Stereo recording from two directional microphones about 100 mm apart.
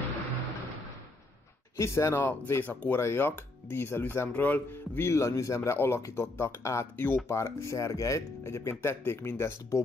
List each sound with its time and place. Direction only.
1.8 s speech: 30° left (ahead or behind)